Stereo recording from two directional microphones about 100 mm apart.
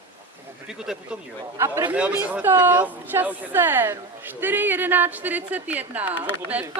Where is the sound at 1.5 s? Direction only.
30° right (ahead or behind).